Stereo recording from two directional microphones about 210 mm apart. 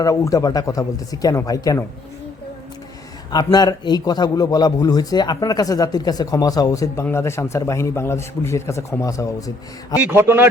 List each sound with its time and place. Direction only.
0.0 s a man's voice: 15° left (ahead or behind)
3.3 s a man's voice: 20° left (ahead or behind)
10.0 s a man's voice: 10° right (ahead or behind)